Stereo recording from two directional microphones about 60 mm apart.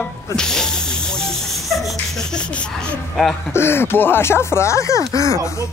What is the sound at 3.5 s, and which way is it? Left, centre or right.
Speech, left.